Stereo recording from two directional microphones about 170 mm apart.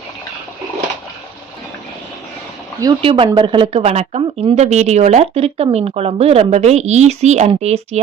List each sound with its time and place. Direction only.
3.0 s speech: 30° right (ahead or behind)